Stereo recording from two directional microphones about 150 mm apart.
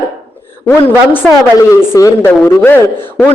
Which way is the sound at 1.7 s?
20° left (ahead or behind).